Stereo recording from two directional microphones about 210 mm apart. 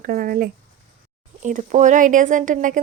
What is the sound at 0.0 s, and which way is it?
Speech, 45° right (ahead or behind).